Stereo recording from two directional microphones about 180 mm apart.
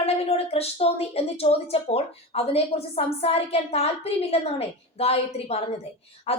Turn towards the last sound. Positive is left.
turn(degrees=35)  # may be behind; listen again after turning